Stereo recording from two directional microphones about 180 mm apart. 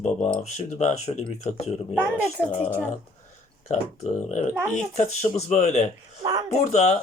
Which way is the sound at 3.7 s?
40° left (ahead or behind).